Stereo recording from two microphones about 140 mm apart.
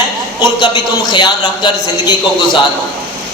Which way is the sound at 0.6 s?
35° left (ahead or behind).